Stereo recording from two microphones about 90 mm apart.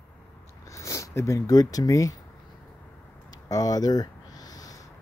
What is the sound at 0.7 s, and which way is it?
Speech, 35° left (ahead or behind).